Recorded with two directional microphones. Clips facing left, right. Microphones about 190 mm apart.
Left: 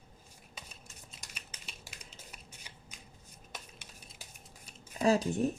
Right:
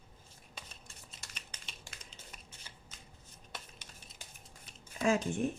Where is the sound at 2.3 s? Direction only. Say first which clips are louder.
Left 1 dB; 15° left (ahead or behind).